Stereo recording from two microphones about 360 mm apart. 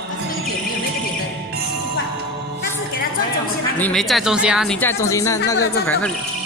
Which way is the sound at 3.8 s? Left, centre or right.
Centre.